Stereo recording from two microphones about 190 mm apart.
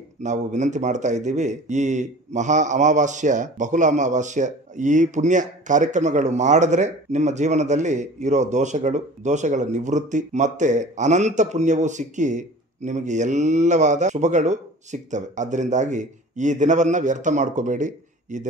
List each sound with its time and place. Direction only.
0.2 s a man's voice: 40° right (ahead or behind)